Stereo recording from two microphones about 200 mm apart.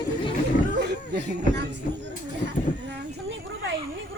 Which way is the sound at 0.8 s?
60° right (ahead or behind).